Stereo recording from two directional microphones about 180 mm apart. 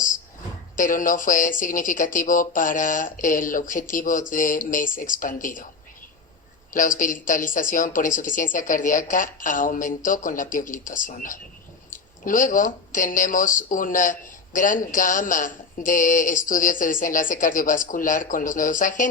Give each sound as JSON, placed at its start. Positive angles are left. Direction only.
{"t": 0.8, "sound": "speech", "side_deg": 50}
{"t": 6.7, "sound": "speech", "side_deg": 50}